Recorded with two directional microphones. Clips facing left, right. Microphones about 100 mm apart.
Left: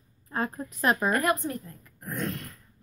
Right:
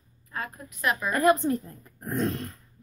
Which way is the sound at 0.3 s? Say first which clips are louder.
Left 5 dB; 35° left (ahead or behind).